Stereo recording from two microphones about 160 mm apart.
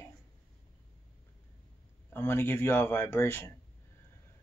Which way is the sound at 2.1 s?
15° left (ahead or behind).